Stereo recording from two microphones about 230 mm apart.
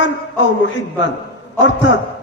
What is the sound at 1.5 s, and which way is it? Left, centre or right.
Speech, left.